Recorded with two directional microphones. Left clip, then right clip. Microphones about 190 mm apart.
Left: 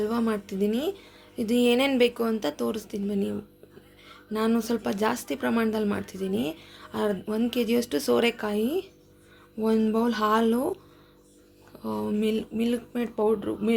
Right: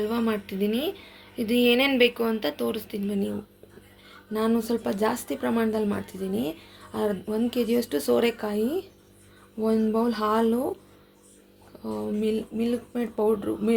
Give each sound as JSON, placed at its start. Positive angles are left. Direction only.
{"t": 0.0, "sound": "speech", "side_deg": 15}
{"t": 11.8, "sound": "speech", "side_deg": 15}